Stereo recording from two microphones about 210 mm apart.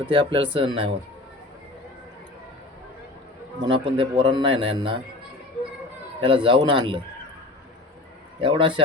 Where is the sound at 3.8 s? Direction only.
25° right (ahead or behind).